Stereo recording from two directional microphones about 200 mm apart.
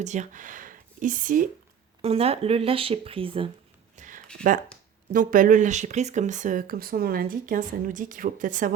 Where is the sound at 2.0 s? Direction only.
30° right (ahead or behind).